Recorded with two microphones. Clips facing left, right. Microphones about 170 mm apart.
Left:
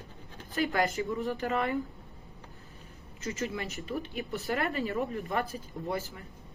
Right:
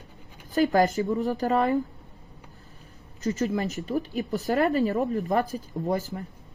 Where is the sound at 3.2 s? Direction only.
40° right (ahead or behind).